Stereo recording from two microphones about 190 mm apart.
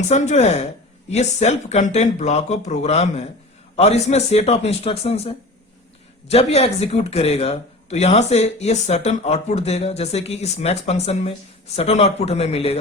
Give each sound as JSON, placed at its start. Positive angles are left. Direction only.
{"t": 0.1, "sound": "speech", "side_deg": 35}